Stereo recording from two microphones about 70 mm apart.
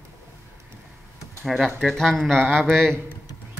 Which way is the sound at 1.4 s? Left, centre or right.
Centre.